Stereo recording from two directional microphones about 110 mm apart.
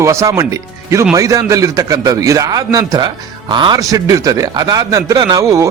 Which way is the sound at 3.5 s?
45° right (ahead or behind).